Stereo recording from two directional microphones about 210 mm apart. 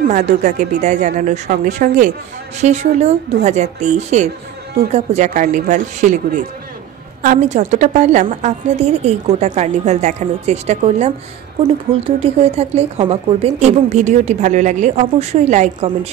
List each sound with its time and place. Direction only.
0.1 s speech: 35° right (ahead or behind)